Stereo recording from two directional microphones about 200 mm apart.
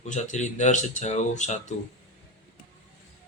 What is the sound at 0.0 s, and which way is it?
Speech, 35° left (ahead or behind).